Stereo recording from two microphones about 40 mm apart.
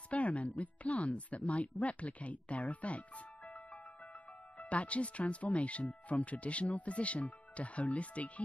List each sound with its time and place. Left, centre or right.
0.1 s speech: left